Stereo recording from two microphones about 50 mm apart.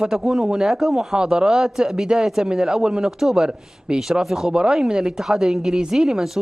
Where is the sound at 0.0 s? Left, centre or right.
Centre.